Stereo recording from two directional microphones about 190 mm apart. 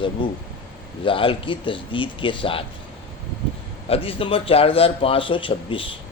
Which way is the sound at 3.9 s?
30° left (ahead or behind).